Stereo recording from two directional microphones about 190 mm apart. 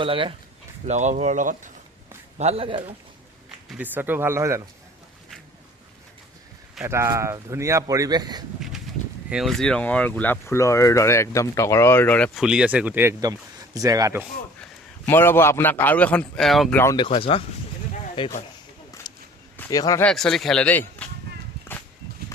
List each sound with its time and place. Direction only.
0.0 s speech: 30° right (ahead or behind)
0.9 s speech: 40° right (ahead or behind)
2.4 s speech: 30° right (ahead or behind)
3.7 s speech: 10° right (ahead or behind)
6.8 s speech: 15° right (ahead or behind)
9.3 s speech: centre (ahead or behind); by 14.3 s 15° right (ahead or behind)
14.6 s a man's voice: 10° left (ahead or behind)
17.0 s speech: 30° left (ahead or behind)
19.1 s walk: 20° left (ahead or behind)
19.5 s a man's voice: 20° left (ahead or behind)
20.1 s speech: centre (ahead or behind)